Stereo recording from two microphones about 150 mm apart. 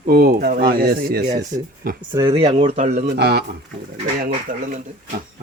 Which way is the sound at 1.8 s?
75° right (ahead or behind).